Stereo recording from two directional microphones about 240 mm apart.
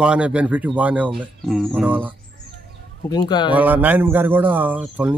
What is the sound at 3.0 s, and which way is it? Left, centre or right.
Speech, centre.